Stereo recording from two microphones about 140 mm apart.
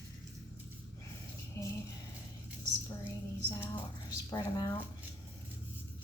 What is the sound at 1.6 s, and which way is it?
Music, 20° left (ahead or behind).